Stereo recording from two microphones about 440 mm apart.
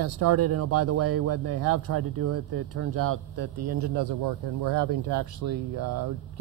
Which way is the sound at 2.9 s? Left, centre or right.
Right.